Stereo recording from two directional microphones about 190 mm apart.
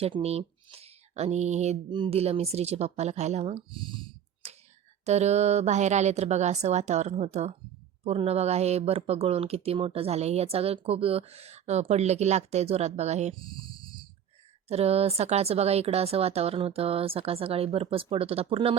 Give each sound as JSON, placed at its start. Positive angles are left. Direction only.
{"t": 0.0, "sound": "speech", "side_deg": -30}